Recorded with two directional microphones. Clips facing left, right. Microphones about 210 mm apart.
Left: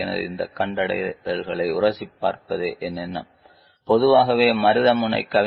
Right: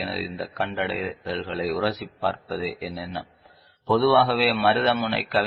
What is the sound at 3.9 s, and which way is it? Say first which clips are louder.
A man's voice: left 4 dB; 20° left (ahead or behind).